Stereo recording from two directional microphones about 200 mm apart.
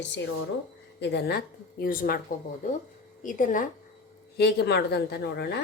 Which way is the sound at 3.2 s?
40° left (ahead or behind).